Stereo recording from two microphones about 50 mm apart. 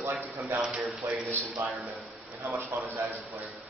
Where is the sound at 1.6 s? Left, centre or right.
Right.